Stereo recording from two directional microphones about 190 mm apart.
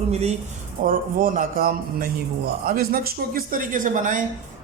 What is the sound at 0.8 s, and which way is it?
A man's voice, 45° right (ahead or behind).